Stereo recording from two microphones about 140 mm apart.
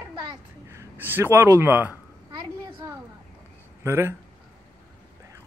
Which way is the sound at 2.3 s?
30° right (ahead or behind).